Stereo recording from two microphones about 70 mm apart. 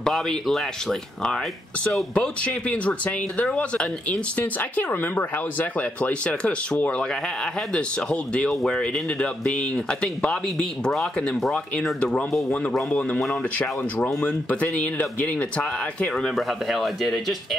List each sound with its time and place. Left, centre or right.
0.0 s speech: centre
13.3 s speech: left; by 17.6 s centre